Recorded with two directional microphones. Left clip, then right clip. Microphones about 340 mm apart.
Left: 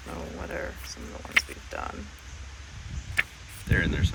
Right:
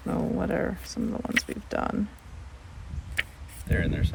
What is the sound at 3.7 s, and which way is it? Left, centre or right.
Speech, centre.